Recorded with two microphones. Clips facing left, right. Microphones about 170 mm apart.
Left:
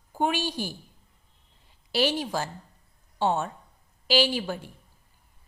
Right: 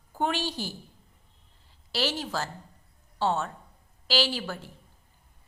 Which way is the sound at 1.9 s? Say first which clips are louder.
Left 4 dB; 15° left (ahead or behind).